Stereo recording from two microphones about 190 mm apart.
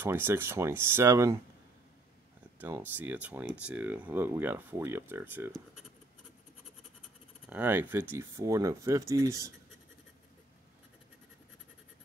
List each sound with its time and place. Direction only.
0.0 s speech: 10° right (ahead or behind)
2.6 s speech: 10° right (ahead or behind)
7.4 s speech: 10° right (ahead or behind)